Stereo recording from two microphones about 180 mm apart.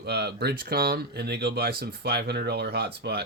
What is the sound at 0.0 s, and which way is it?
Speech, 65° right (ahead or behind).